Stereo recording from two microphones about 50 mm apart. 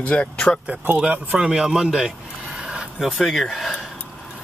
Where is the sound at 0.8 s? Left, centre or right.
Right.